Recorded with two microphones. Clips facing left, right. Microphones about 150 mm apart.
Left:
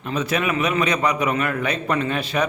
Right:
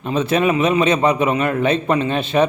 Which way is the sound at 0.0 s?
25° right (ahead or behind).